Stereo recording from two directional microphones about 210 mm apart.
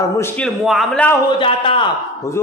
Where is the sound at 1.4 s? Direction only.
25° left (ahead or behind).